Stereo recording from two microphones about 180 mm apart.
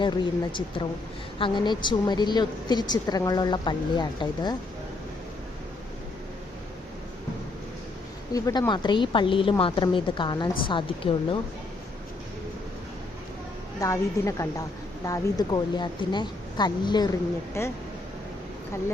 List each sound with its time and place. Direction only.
1.4 s a woman's voice: 25° left (ahead or behind)
8.3 s a woman's voice: 20° left (ahead or behind)
13.7 s a woman's voice: 15° left (ahead or behind)